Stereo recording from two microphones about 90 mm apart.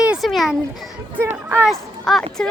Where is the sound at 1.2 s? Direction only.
25° right (ahead or behind).